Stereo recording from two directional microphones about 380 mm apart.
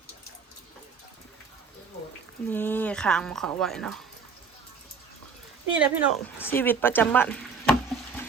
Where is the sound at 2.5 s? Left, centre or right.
Centre.